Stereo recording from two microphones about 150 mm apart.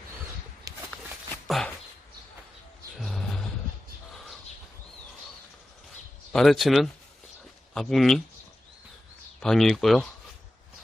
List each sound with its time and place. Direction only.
0.7 s a sound: 25° right (ahead or behind)
1.5 s a sound: centre (ahead or behind)
3.0 s music: centre (ahead or behind)
4.1 s bird: centre (ahead or behind)
6.3 s speech: centre (ahead or behind)
9.4 s speech: centre (ahead or behind)